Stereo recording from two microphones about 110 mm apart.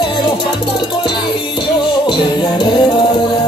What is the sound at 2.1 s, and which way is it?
Music, 45° left (ahead or behind).